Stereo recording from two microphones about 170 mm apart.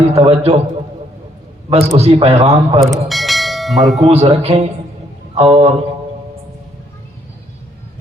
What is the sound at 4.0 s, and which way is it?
A man's voice, 35° right (ahead or behind).